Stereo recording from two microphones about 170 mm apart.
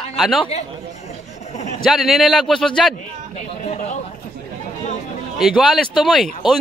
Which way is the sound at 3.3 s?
40° left (ahead or behind).